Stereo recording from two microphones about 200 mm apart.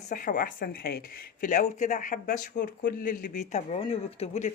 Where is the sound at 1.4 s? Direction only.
35° left (ahead or behind).